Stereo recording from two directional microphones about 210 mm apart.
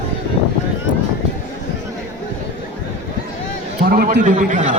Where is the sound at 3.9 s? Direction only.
40° right (ahead or behind).